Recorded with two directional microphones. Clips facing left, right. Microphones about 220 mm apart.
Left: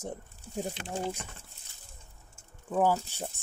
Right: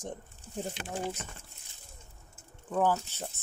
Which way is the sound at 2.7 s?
10° left (ahead or behind).